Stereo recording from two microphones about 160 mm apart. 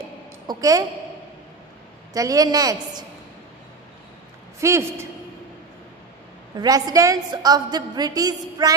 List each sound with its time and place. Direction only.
0.5 s a woman's voice: 20° right (ahead or behind)
2.1 s a woman's voice: 20° right (ahead or behind)
4.6 s a man's voice: 20° right (ahead or behind)
6.6 s a woman's voice: 25° right (ahead or behind)